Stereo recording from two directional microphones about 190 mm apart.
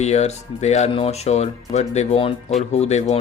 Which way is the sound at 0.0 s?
35° left (ahead or behind).